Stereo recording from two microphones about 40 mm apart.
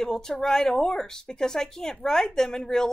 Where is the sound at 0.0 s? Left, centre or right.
Centre.